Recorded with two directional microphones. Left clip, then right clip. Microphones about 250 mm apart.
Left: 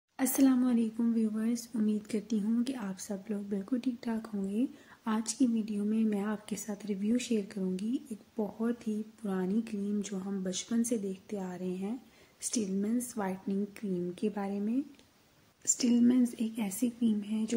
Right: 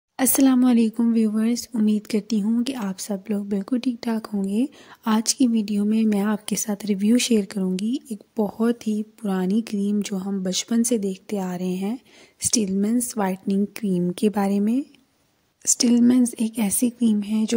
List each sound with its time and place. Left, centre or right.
0.2 s a woman's voice: right
15.8 s a woman's voice: right